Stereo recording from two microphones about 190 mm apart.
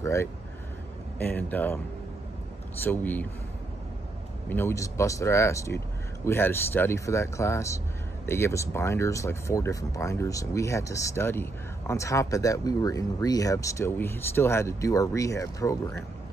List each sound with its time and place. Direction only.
0.0 s speech: 15° left (ahead or behind)
2.8 s speech: 10° left (ahead or behind)
4.5 s speech: 10° left (ahead or behind)